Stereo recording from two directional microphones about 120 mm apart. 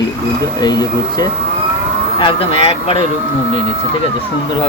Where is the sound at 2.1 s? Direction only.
50° left (ahead or behind).